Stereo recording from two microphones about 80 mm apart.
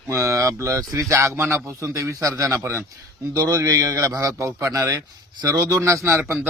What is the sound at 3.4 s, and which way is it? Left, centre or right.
Speech, right.